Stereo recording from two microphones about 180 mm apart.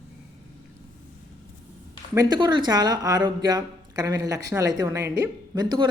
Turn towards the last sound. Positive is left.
turn(degrees=-20)  # may be behind; listen again after turning